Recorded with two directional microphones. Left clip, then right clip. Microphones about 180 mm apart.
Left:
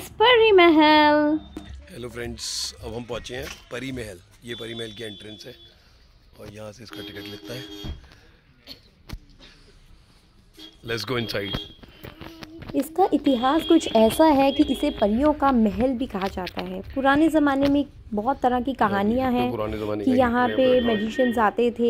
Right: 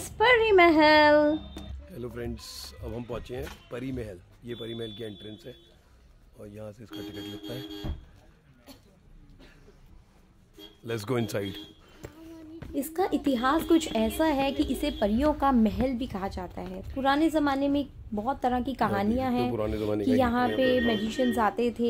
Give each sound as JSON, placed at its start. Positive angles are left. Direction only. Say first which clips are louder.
{"t": 0.0, "sound": "a man's voice", "louder": "left 5 dB", "side_deg": 15}
{"t": 8.7, "sound": "a sound", "louder": "left 9 dB", "side_deg": -45}
{"t": 10.9, "sound": "speech", "louder": "left 4 dB", "side_deg": -15}
{"t": 12.5, "sound": "a woman's voice", "louder": "left 8 dB", "side_deg": 5}
{"t": 13.9, "sound": "a woman's voice", "louder": "left 9 dB", "side_deg": 30}
{"t": 19.5, "sound": "speech", "louder": "left 2 dB", "side_deg": -15}
{"t": 20.2, "sound": "a woman's voice", "louder": "left 7 dB", "side_deg": 15}